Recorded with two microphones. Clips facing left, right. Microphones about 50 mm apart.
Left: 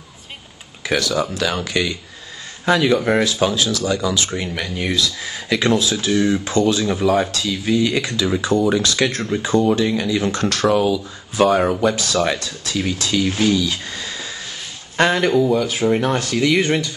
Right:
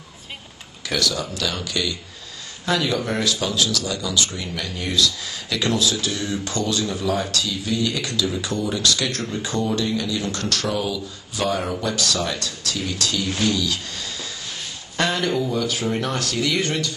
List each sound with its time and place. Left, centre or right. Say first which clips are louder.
0.8 s speech: left 5 dB; left
16.6 s speech: left 5 dB; left